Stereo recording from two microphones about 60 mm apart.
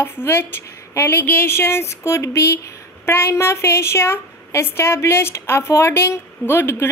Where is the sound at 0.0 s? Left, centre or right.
Left.